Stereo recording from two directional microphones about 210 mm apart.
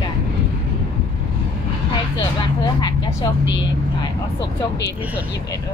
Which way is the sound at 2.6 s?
20° left (ahead or behind).